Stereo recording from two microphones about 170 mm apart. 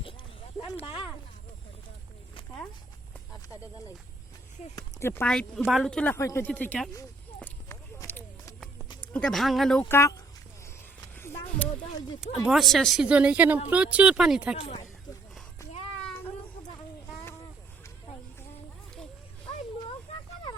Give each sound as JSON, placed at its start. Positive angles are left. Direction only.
{"t": 0.6, "sound": "speech", "side_deg": 30}
{"t": 4.7, "sound": "speech", "side_deg": 20}
{"t": 5.3, "sound": "speech", "side_deg": 0}
{"t": 6.1, "sound": "speech", "side_deg": 15}
{"t": 7.4, "sound": "a sound", "side_deg": 15}
{"t": 9.1, "sound": "speech", "side_deg": 5}
{"t": 9.9, "sound": "speech", "side_deg": 15}
{"t": 11.0, "sound": "a sound", "side_deg": 15}
{"t": 12.5, "sound": "speech", "side_deg": 0}
{"t": 14.5, "sound": "speech", "side_deg": 35}